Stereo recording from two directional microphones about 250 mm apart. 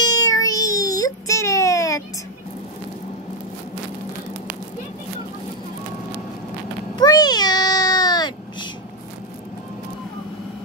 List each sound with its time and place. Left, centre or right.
0.0 s baby cry: centre
7.0 s meow: centre